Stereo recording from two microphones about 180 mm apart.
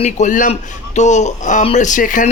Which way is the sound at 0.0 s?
45° left (ahead or behind).